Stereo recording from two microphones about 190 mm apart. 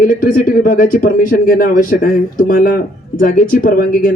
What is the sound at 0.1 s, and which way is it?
Speech, 50° left (ahead or behind).